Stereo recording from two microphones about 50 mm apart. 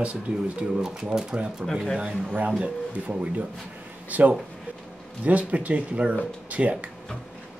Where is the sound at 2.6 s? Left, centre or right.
Right.